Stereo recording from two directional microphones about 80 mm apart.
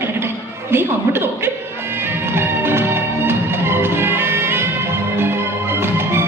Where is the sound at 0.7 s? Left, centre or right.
Right.